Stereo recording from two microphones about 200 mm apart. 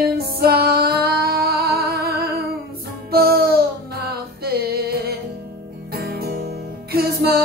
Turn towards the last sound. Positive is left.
turn(degrees=-50)  # may be behind; listen again after turning